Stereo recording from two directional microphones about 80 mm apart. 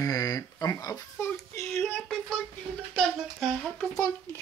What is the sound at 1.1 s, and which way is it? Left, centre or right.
Child singing, left.